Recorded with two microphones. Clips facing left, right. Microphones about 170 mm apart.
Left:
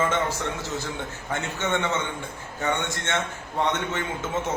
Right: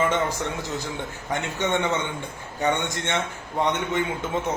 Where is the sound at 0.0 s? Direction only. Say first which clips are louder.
Right 1 dB; 15° right (ahead or behind).